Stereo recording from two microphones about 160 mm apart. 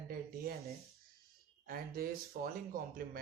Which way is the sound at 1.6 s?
70° right (ahead or behind).